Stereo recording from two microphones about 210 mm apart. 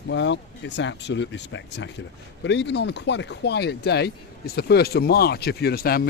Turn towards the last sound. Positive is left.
turn(degrees=45)  # may be behind; listen again after turning